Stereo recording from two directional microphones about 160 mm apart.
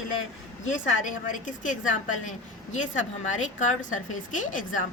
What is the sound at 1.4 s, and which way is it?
Speech, 55° left (ahead or behind).